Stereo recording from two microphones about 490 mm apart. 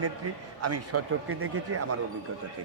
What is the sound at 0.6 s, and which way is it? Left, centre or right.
A man's voice, right.